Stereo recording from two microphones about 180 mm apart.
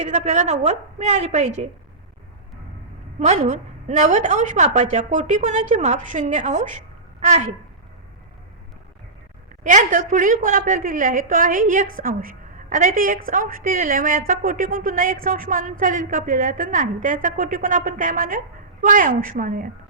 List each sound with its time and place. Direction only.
0.0 s a woman's voice: 40° right (ahead or behind)
3.2 s a woman's voice: 40° right (ahead or behind)
9.6 s a woman's voice: 45° right (ahead or behind)